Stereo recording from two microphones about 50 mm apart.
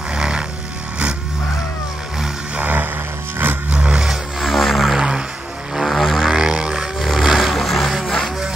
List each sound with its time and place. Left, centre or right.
0.1 s vehicle: centre
2.5 s music: right
3.7 s music: right
4.0 s music: centre
4.9 s music: centre
5.8 s vehicle: centre
7.5 s music: centre